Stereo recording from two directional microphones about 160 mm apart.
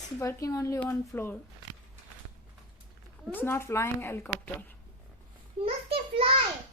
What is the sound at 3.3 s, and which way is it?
A woman's voice, 15° left (ahead or behind).